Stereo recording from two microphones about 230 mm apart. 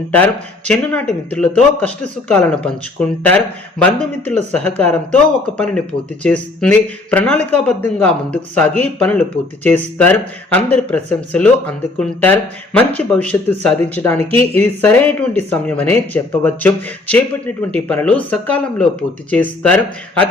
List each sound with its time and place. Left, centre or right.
0.1 s speech: centre
14.2 s speech: right
14.5 s speech: centre